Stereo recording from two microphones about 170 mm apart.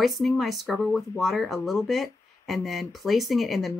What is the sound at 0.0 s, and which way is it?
Speech, centre (ahead or behind).